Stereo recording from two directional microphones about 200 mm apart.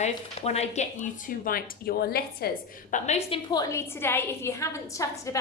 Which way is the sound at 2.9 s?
35° left (ahead or behind).